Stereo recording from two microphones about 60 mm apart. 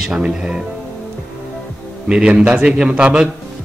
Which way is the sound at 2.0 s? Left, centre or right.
Centre.